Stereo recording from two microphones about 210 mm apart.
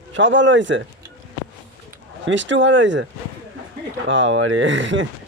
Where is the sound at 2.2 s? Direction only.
60° right (ahead or behind).